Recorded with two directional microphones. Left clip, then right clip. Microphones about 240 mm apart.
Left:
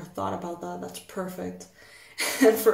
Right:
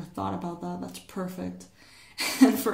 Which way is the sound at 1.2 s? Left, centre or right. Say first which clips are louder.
Left 2 dB; right.